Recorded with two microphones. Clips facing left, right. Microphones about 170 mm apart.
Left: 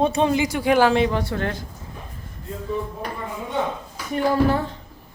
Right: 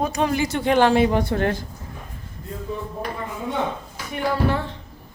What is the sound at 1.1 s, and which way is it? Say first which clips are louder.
Speech: right 3 dB; 20° right (ahead or behind).